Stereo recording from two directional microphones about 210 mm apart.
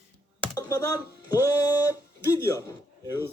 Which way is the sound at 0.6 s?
20° left (ahead or behind).